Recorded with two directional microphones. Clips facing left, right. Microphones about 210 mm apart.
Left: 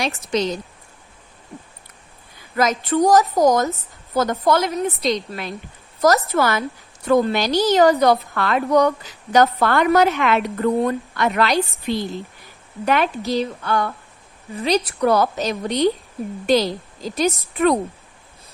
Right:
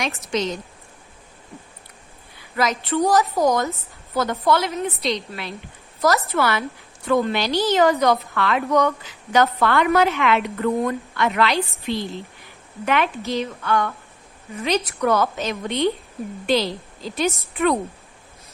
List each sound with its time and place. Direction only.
0.2 s a woman's voice: 35° left (ahead or behind)
2.6 s a woman's voice: 45° left (ahead or behind)